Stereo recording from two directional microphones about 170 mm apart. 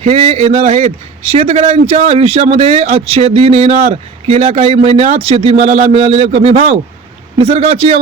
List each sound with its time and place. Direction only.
0.0 s speech: 40° right (ahead or behind)